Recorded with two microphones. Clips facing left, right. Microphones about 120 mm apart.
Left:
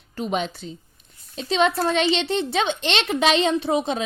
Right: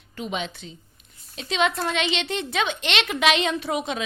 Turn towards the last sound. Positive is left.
turn(degrees=30)  # may be behind; listen again after turning